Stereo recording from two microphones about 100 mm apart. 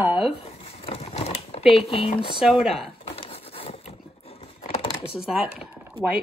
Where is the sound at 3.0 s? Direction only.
70° left (ahead or behind).